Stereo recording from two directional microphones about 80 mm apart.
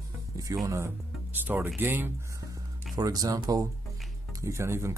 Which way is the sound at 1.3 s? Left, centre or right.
Right.